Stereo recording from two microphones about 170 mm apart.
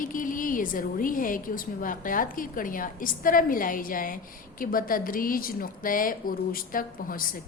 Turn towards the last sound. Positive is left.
turn(degrees=55)  # may be behind; listen again after turning